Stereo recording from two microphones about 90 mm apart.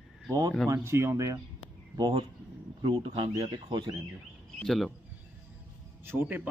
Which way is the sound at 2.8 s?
70° right (ahead or behind).